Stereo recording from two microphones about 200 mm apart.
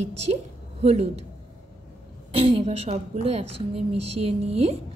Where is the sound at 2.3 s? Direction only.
30° right (ahead or behind).